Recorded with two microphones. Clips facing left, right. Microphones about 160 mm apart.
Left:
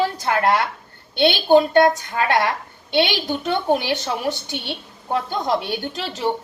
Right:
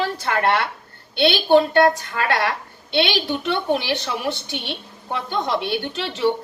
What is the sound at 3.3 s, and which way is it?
A woman's voice, 45° left (ahead or behind).